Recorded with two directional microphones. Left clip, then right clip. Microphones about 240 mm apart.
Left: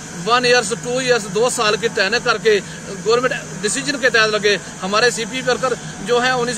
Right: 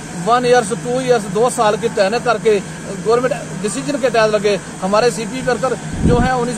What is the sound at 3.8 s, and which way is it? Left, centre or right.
Speech, centre.